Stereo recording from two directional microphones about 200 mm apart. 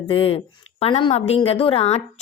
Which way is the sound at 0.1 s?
25° left (ahead or behind).